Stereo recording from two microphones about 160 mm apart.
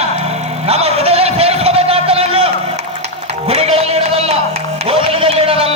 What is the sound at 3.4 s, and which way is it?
Music, 40° right (ahead or behind).